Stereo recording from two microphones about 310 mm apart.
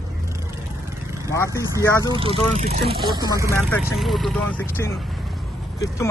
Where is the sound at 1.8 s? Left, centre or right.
Centre.